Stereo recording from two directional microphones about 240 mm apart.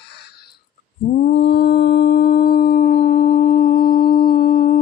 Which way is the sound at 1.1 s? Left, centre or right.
Left.